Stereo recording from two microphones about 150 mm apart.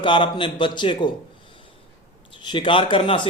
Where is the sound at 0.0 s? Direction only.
35° left (ahead or behind).